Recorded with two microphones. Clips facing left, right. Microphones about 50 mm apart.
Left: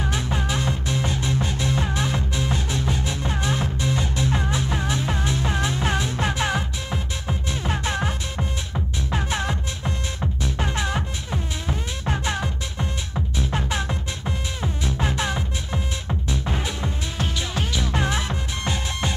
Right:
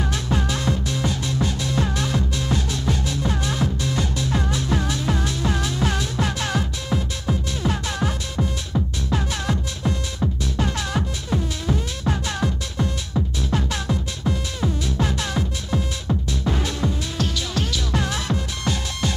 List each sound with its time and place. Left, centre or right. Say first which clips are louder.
0.0 s music: right 2 dB; centre